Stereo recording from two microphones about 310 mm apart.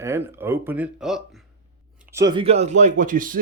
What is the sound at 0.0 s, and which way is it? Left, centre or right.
Speech, centre.